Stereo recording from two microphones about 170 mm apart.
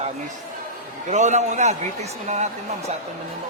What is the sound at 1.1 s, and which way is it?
A man's voice, 45° right (ahead or behind).